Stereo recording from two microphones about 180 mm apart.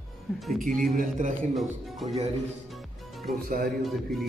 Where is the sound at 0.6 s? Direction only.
50° right (ahead or behind).